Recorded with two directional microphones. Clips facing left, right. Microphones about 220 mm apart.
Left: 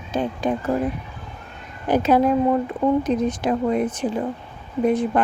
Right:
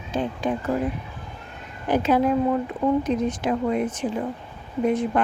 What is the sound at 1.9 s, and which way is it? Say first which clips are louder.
A woman's voice: left 3 dB; 40° left (ahead or behind).